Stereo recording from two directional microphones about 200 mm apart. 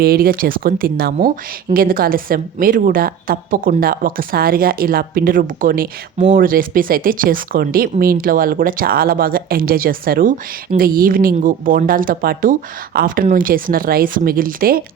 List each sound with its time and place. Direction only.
0.0 s speech: 50° right (ahead or behind)